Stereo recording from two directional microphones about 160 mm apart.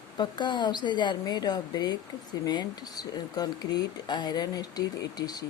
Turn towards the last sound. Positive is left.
turn(degrees=25)  # may be behind; listen again after turning